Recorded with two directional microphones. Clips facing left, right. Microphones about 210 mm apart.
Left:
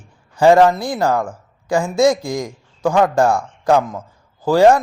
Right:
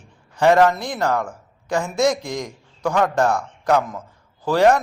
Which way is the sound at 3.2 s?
30° left (ahead or behind).